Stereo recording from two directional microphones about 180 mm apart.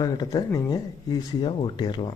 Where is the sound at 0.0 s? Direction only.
20° left (ahead or behind).